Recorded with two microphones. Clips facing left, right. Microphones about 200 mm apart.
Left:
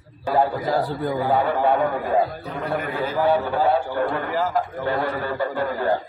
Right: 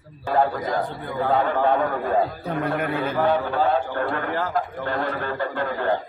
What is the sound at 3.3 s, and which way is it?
A man's voice, 10° left (ahead or behind).